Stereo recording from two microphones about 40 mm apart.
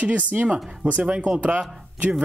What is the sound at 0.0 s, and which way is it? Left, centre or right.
Speech, right.